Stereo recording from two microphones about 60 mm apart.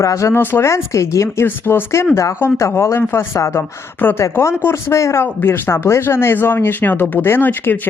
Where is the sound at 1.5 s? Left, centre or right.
Left.